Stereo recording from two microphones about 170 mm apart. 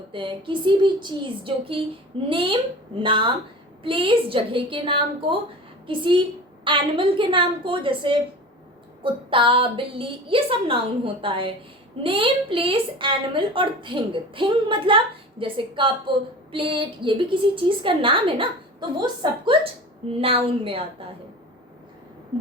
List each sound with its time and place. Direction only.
0.1 s a woman's voice: 30° right (ahead or behind)
9.3 s a woman's voice: 30° right (ahead or behind)